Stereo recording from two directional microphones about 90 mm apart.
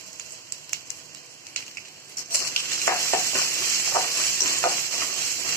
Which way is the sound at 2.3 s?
35° left (ahead or behind).